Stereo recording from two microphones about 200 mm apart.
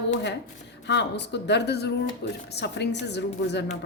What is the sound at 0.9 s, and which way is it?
A woman's voice, 60° left (ahead or behind).